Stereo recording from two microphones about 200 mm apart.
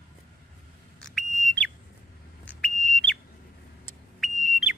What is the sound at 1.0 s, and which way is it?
Bird, 5° left (ahead or behind).